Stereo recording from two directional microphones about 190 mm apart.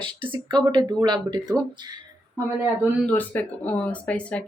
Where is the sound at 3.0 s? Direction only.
10° left (ahead or behind).